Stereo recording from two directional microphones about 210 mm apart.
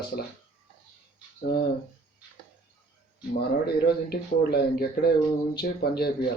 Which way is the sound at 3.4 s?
50° left (ahead or behind).